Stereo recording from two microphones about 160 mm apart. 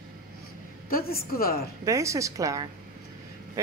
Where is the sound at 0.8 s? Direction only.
70° left (ahead or behind).